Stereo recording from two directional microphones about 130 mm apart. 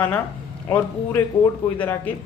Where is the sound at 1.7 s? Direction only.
10° left (ahead or behind).